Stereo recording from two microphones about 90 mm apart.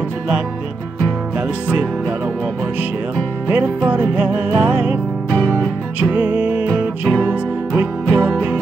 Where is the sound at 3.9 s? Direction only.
15° right (ahead or behind).